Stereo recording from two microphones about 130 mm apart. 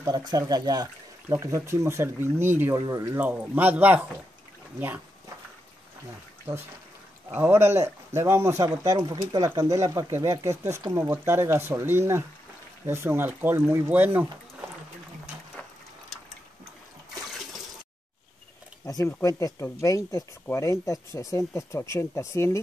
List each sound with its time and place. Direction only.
0.0 s speech: 30° right (ahead or behind)
3.2 s speech: 15° right (ahead or behind)
7.3 s speech: 20° right (ahead or behind)
17.3 s water: centre (ahead or behind)
18.9 s speech: 30° left (ahead or behind)